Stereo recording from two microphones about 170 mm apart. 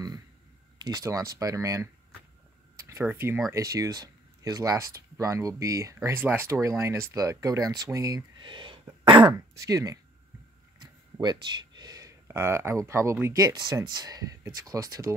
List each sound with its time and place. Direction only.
0.8 s speech: 20° right (ahead or behind)